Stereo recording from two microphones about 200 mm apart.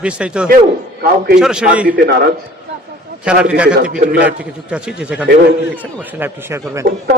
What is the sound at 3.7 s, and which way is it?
Speech, 45° right (ahead or behind).